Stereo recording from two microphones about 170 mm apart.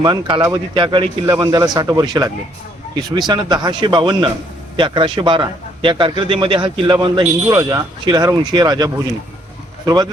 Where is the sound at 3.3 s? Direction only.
25° right (ahead or behind).